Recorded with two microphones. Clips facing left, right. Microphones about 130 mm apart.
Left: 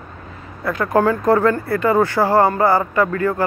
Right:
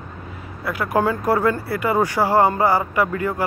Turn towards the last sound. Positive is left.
turn(degrees=-15)  # may be behind; listen again after turning